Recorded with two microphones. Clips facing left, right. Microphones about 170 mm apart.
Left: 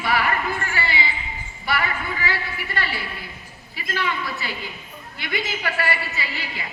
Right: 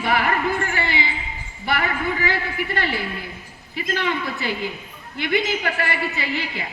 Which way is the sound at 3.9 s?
55° right (ahead or behind).